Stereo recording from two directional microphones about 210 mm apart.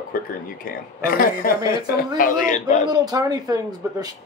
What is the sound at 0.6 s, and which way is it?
A man's voice, 45° left (ahead or behind).